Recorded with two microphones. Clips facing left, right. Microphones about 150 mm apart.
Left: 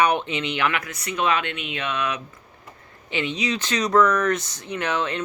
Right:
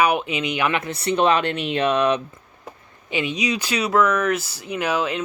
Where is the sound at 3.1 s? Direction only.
15° right (ahead or behind).